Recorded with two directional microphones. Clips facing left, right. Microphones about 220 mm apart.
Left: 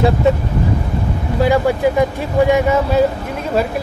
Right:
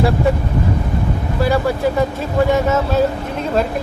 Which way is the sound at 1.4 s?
15° left (ahead or behind).